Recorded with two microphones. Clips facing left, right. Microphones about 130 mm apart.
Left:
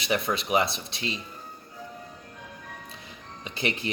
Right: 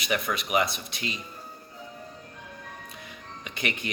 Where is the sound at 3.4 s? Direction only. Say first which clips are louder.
Left 3 dB; 30° left (ahead or behind).